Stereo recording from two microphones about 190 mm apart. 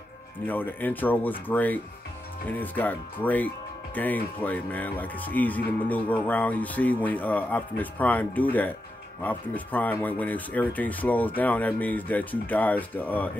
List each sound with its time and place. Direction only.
0.5 s speech: 10° left (ahead or behind)